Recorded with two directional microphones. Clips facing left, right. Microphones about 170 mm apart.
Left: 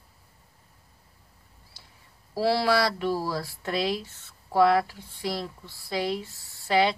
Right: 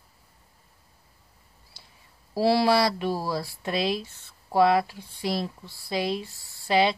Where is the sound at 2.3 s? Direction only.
15° right (ahead or behind).